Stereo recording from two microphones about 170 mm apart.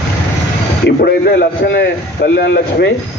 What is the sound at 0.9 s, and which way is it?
A man's voice, 65° left (ahead or behind).